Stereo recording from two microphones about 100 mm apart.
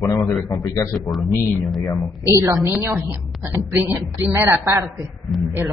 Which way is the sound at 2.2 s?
30° right (ahead or behind).